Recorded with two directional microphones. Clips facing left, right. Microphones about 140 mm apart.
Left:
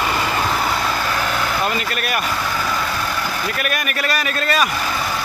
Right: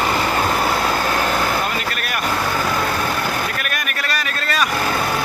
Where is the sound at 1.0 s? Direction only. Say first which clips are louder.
Right 2 dB; 45° right (ahead or behind).